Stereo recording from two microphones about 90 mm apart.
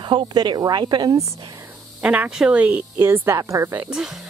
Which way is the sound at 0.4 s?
50° right (ahead or behind).